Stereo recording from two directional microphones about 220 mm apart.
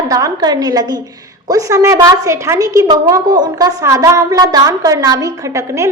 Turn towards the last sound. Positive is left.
turn(degrees=-15)  # may be behind; listen again after turning